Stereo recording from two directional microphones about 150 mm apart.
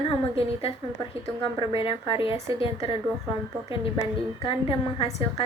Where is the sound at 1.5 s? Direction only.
35° left (ahead or behind).